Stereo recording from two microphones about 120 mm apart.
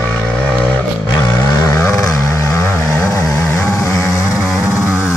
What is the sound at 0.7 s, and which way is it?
Vehicle, 20° left (ahead or behind).